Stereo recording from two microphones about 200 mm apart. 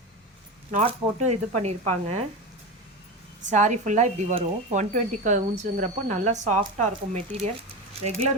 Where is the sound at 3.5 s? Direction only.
35° right (ahead or behind).